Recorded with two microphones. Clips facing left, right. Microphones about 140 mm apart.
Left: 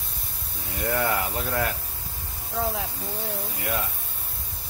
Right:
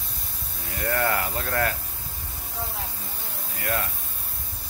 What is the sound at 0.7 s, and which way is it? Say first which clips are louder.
Speech: even; 15° left (ahead or behind).